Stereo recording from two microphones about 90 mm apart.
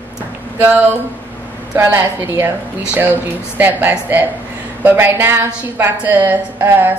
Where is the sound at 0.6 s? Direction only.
20° right (ahead or behind).